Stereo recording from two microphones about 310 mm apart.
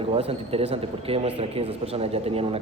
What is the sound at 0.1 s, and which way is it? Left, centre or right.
A man's voice, centre.